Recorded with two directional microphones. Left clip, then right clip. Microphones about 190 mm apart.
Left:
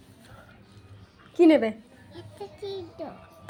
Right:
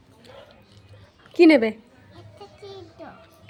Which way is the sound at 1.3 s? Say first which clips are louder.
Right 4 dB; 40° right (ahead or behind).